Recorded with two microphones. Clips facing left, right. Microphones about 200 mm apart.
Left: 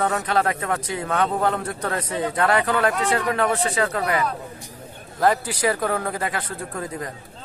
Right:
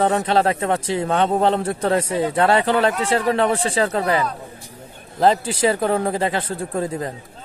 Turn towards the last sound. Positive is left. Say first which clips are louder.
# right 6 dB
turn(degrees=-30)  # may be behind; listen again after turning